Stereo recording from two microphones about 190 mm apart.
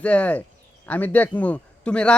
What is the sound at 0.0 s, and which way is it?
A man's voice, 5° left (ahead or behind).